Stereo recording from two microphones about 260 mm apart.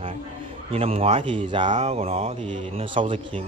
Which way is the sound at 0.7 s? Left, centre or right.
Right.